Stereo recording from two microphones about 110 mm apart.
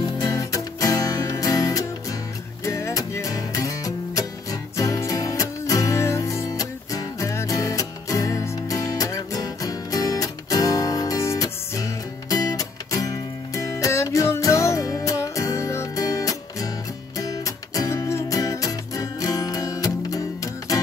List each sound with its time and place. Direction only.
0.2 s music: 30° left (ahead or behind)